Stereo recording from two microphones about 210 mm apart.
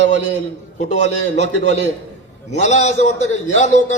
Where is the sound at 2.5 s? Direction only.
35° left (ahead or behind).